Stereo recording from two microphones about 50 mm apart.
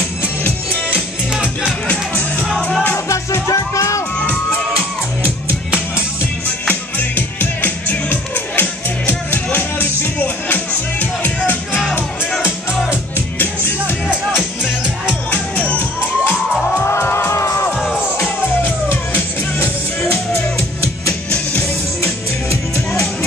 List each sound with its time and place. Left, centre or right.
0.2 s music: left
1.6 s music: left
3.4 s music: left
6.7 s music: left
15.3 s music: left
16.8 s music: left
18.2 s music: left
22.0 s music: left